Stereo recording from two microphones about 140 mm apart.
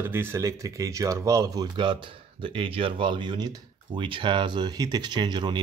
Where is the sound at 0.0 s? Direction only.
15° right (ahead or behind).